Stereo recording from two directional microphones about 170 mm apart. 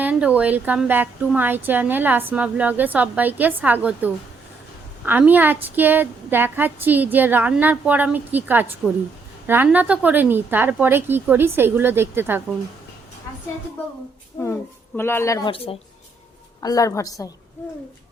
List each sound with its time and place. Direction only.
0.0 s a woman's voice: 10° right (ahead or behind)
14.4 s a woman's voice: 25° left (ahead or behind)
15.4 s speech: 35° left (ahead or behind)
16.6 s a woman's voice: 20° left (ahead or behind)